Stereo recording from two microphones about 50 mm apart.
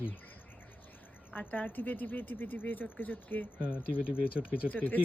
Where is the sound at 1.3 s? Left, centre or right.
Left.